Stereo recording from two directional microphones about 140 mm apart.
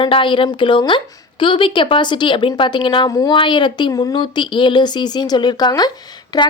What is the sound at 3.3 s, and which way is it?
A woman's voice, 35° left (ahead or behind).